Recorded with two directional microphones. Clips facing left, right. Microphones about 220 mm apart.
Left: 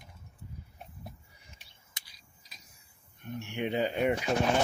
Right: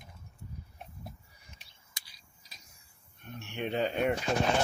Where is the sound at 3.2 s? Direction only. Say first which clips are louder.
Left 3 dB; 15° left (ahead or behind).